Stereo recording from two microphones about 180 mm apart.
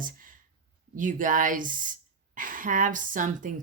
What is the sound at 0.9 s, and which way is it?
Speech, 45° right (ahead or behind).